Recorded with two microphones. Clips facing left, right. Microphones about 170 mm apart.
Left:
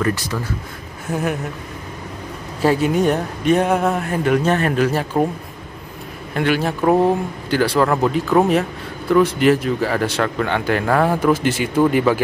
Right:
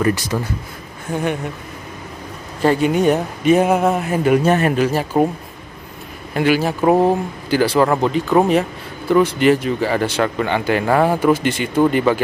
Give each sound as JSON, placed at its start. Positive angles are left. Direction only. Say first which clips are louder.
{"t": 0.0, "sound": "speech", "louder": "right 3 dB", "side_deg": -15}
{"t": 1.1, "sound": "speech", "louder": "right 1 dB", "side_deg": 5}
{"t": 2.6, "sound": "speech", "louder": "right 1 dB", "side_deg": 5}
{"t": 6.3, "sound": "speech", "louder": "right 2 dB", "side_deg": -5}